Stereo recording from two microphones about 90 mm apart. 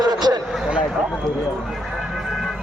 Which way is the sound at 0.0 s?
50° right (ahead or behind).